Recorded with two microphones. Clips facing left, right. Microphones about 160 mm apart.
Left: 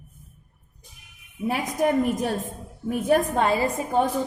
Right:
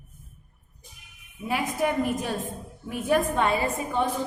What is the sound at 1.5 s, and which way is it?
A woman's voice, 45° left (ahead or behind).